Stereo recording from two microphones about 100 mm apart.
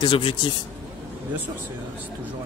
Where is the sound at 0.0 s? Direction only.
60° left (ahead or behind).